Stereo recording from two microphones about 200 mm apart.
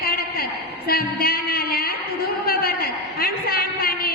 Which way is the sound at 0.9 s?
50° left (ahead or behind).